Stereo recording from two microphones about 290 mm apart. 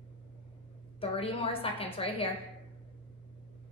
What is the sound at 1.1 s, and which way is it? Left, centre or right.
A woman's voice, centre.